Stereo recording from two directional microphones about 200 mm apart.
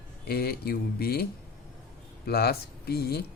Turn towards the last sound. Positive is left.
turn(degrees=50)  # may be behind; listen again after turning